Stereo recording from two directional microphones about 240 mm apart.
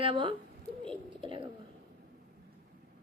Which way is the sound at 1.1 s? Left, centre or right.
Right.